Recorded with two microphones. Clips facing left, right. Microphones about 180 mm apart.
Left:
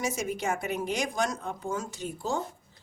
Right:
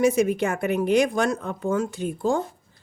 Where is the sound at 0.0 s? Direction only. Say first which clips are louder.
Right 11 dB; 60° right (ahead or behind).